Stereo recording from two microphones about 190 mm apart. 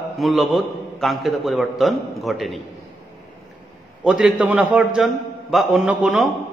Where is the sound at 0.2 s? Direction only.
Centre (ahead or behind).